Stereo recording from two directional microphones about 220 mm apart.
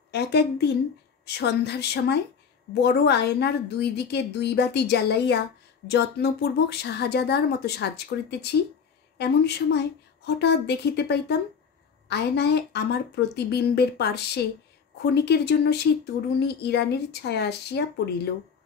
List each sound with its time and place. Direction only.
0.1 s a woman's voice: 50° left (ahead or behind)